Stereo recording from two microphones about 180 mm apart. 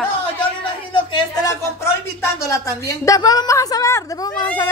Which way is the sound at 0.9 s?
25° left (ahead or behind).